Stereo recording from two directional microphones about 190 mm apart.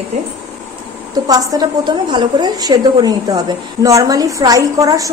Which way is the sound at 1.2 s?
20° right (ahead or behind).